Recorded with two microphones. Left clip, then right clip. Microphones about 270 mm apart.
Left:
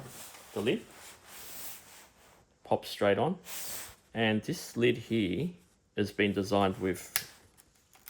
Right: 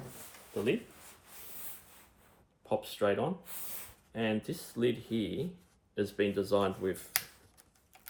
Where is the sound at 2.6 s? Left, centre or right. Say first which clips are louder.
Left 3 dB; left.